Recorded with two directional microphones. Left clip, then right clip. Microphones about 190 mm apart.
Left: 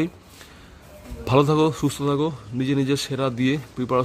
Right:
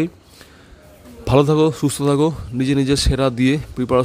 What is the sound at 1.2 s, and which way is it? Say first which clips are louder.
A man's voice: right 4 dB; 15° right (ahead or behind).